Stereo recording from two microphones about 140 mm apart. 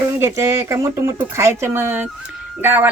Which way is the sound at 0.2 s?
20° right (ahead or behind).